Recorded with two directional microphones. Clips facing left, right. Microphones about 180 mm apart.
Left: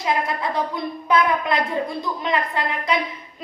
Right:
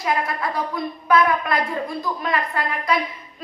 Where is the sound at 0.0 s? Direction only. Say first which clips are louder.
Even; 20° left (ahead or behind).